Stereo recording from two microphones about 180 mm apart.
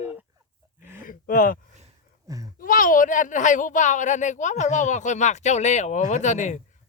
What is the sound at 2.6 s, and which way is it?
Speech, 50° left (ahead or behind).